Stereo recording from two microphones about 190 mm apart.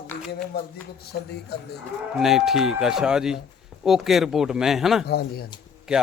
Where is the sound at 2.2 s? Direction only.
Centre (ahead or behind).